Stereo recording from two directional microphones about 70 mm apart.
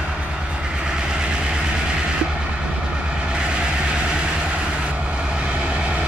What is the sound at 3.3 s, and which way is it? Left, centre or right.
Vehicle, centre.